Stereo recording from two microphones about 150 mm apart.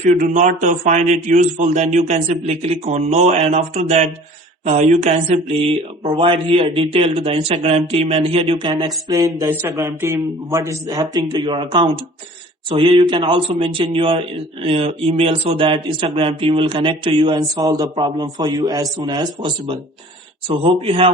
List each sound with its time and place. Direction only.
0.0 s a man's voice: 55° right (ahead or behind); by 21.1 s 40° right (ahead or behind)